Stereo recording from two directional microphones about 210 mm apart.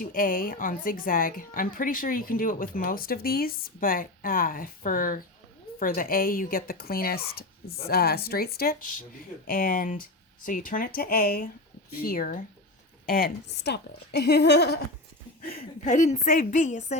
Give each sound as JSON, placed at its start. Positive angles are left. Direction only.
{"t": 0.0, "sound": "a woman's voice", "side_deg": 40}
{"t": 15.4, "sound": "a woman's voice", "side_deg": 35}